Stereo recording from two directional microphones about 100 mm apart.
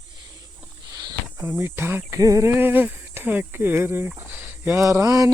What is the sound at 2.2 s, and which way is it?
Speech, 35° right (ahead or behind).